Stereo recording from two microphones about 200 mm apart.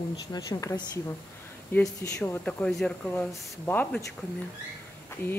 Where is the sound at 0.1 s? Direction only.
20° left (ahead or behind).